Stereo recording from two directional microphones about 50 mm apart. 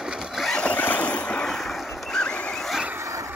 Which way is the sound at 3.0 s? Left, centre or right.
Right.